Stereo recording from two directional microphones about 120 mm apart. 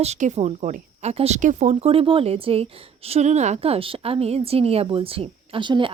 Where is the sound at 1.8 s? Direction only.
50° right (ahead or behind).